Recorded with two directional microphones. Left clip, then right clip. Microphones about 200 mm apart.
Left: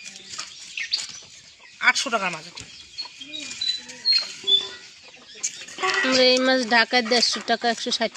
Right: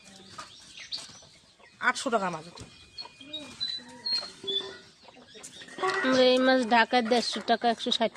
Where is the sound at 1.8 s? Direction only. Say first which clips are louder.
Left 8 dB; 30° right (ahead or behind).